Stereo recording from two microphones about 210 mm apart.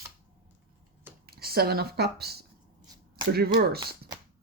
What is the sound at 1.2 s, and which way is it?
Speech, 45° right (ahead or behind).